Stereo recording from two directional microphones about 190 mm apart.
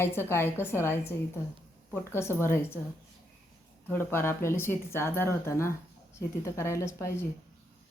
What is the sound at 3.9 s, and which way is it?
A woman's voice, 10° left (ahead or behind).